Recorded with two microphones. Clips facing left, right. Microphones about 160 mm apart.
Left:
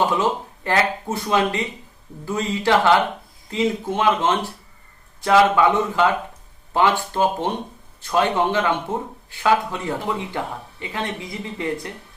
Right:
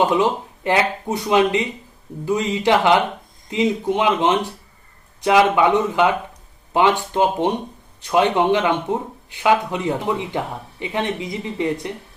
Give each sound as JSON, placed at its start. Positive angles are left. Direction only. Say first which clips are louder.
{"t": 0.1, "sound": "a man's voice", "louder": "right 3 dB", "side_deg": -15}